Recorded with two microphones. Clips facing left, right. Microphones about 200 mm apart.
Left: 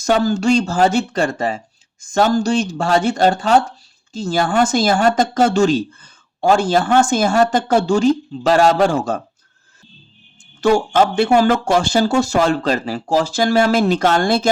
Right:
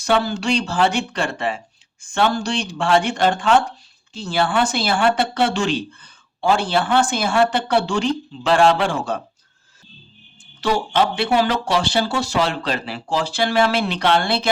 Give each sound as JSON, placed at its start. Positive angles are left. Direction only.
{"t": 0.0, "sound": "speech", "side_deg": 45}
{"t": 10.6, "sound": "speech", "side_deg": 45}